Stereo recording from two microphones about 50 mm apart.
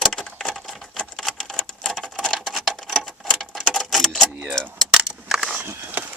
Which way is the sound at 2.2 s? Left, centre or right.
Centre.